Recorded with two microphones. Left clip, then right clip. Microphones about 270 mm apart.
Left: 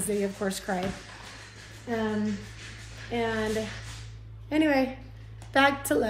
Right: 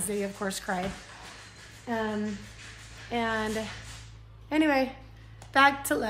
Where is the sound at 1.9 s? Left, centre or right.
Centre.